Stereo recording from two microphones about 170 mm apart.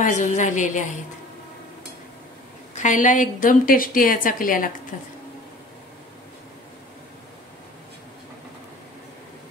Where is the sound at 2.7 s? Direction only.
50° left (ahead or behind).